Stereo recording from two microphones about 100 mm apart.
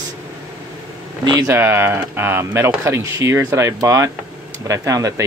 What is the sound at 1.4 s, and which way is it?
Speech, 25° right (ahead or behind).